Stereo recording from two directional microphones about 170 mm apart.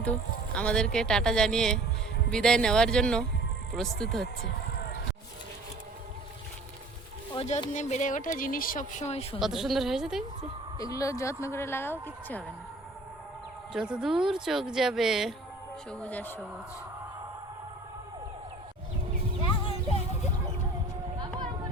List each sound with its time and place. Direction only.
0.5 s speech: 5° left (ahead or behind)
7.3 s speech: 40° left (ahead or behind)
9.4 s speech: centre (ahead or behind)
10.8 s speech: 20° left (ahead or behind)
13.7 s speech: 5° right (ahead or behind)
21.2 s vehicle: 25° right (ahead or behind)